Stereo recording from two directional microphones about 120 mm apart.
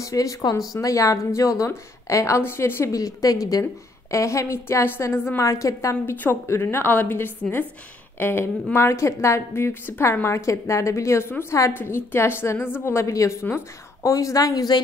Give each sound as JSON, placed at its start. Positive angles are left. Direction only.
{"t": 0.0, "sound": "a woman's voice", "side_deg": 25}